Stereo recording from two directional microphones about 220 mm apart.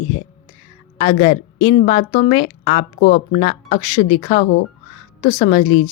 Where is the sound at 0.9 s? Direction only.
25° left (ahead or behind).